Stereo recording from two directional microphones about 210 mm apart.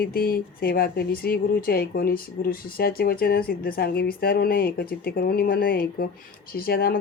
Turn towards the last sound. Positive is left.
turn(degrees=45)  # may be behind; listen again after turning